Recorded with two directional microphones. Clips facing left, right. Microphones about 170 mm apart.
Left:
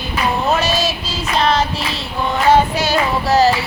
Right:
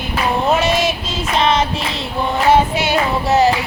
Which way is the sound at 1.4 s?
20° right (ahead or behind).